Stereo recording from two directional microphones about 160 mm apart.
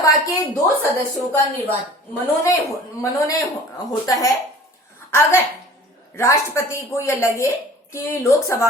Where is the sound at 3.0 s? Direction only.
20° left (ahead or behind).